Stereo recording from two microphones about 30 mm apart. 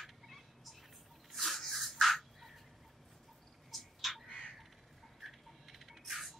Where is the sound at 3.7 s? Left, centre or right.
Centre.